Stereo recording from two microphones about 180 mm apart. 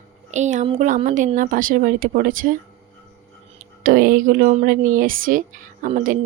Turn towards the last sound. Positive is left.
turn(degrees=-45)  # may be behind; listen again after turning